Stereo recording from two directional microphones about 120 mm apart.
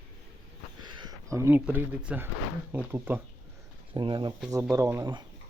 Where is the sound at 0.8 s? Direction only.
40° right (ahead or behind); by 3.2 s 15° right (ahead or behind).